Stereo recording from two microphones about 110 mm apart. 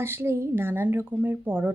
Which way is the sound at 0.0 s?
20° right (ahead or behind).